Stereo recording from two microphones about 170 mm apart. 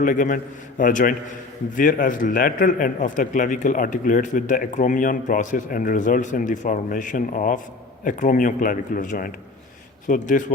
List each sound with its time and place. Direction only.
0.0 s speech: 50° left (ahead or behind)